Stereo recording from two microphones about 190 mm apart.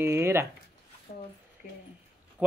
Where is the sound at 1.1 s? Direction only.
30° left (ahead or behind).